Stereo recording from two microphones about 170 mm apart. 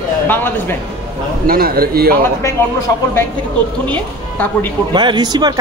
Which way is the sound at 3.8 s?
10° left (ahead or behind).